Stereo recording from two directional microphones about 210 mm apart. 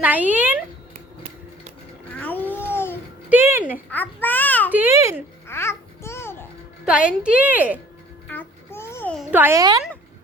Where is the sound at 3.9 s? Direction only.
10° left (ahead or behind).